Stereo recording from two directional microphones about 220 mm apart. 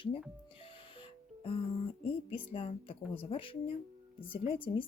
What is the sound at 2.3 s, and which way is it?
Speech, 25° left (ahead or behind).